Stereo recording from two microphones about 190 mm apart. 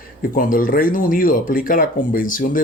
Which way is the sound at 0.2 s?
45° left (ahead or behind).